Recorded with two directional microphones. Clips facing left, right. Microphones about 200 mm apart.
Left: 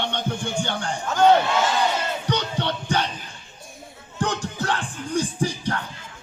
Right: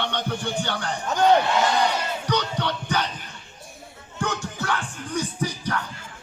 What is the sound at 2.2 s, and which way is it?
Music, 25° left (ahead or behind).